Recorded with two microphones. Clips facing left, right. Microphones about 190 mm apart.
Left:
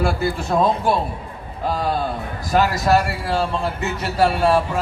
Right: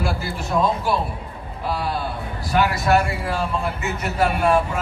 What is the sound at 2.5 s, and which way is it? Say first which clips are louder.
A man's voice: left 2 dB; 40° left (ahead or behind).